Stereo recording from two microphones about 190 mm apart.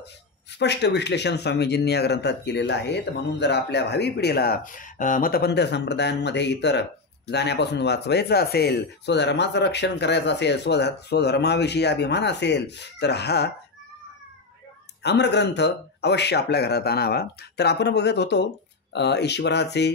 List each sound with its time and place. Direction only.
0.6 s speech: 60° left (ahead or behind)
15.0 s speech: 65° left (ahead or behind)